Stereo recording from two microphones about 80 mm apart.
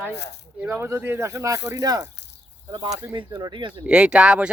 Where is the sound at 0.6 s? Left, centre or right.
Right.